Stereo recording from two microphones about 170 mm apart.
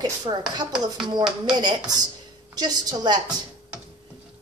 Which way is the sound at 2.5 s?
25° right (ahead or behind).